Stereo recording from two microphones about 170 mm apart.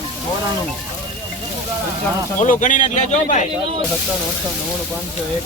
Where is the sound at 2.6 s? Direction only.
50° left (ahead or behind).